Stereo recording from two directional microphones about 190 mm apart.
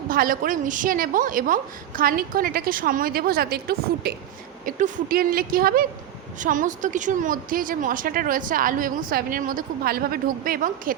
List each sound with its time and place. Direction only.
0.1 s a woman's voice: 50° right (ahead or behind)